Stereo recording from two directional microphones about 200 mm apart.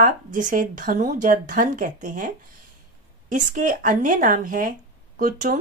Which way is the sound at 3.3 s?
40° right (ahead or behind).